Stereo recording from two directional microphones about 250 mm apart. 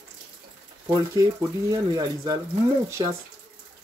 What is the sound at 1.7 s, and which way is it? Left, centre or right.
Speech, centre.